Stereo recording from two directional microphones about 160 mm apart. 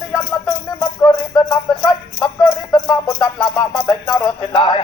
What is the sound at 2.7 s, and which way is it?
A man's voice, 25° left (ahead or behind).